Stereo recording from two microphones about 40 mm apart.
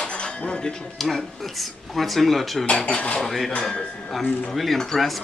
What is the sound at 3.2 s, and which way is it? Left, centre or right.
Speech, centre.